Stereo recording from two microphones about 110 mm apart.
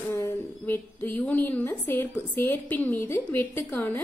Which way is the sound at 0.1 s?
25° left (ahead or behind).